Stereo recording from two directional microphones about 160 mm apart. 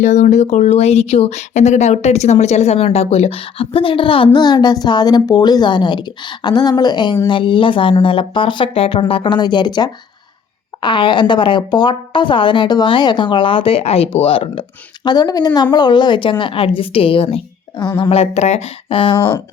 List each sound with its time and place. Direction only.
0.0 s a woman's voice: 50° left (ahead or behind); by 18.1 s 25° left (ahead or behind)
18.1 s speech: 40° left (ahead or behind)